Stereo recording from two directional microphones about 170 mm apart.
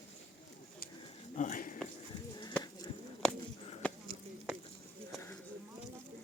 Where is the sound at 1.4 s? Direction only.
50° left (ahead or behind).